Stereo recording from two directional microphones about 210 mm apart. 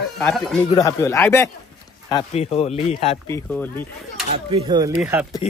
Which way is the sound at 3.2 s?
10° left (ahead or behind).